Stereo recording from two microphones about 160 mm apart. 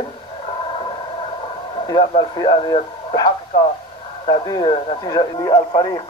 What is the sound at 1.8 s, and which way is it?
Speech, 35° left (ahead or behind).